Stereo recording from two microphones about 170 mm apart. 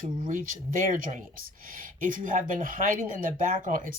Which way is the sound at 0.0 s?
50° right (ahead or behind).